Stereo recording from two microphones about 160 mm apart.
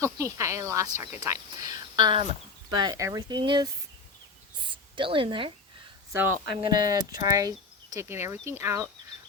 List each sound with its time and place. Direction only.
0.0 s speech: 20° right (ahead or behind)
4.5 s a sound: 30° right (ahead or behind)
6.1 s speech: 10° right (ahead or behind)
6.6 s speech: 25° right (ahead or behind)